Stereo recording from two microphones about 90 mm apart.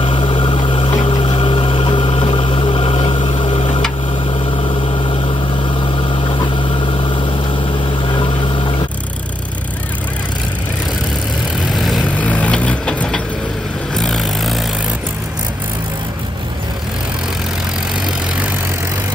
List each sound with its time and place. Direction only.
0.0 s a sound: 75° left (ahead or behind)
1.0 s a sound: 85° left
4.3 s vehicle: 85° left
6.2 s vehicle: 65° left (ahead or behind)
11.7 s vehicle: centre (ahead or behind)
12.1 s vehicle: 15° left (ahead or behind)